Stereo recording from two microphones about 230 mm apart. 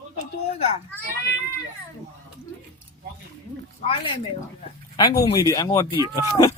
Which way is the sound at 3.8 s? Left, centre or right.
Left.